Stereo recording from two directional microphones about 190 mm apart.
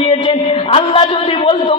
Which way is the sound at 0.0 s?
25° left (ahead or behind).